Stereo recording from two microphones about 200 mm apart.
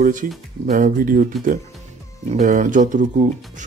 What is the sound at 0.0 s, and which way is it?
Speech, 40° right (ahead or behind).